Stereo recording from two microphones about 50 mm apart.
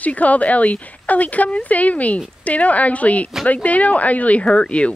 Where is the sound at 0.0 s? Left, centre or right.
Left.